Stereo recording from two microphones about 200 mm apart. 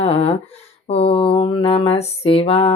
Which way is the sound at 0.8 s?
30° left (ahead or behind).